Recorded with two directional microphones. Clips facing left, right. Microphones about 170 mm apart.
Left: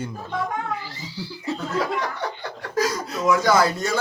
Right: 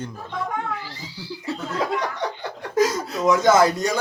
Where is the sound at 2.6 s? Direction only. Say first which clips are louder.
Right 4 dB; 20° right (ahead or behind).